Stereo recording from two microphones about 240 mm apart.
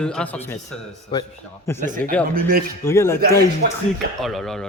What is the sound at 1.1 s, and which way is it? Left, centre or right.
Speech, centre.